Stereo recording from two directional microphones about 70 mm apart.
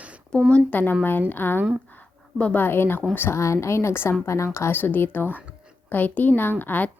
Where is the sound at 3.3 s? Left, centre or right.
Left.